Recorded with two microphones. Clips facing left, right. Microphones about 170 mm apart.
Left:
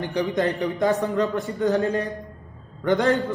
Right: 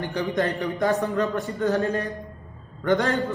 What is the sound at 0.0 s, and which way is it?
A man's voice, 15° left (ahead or behind).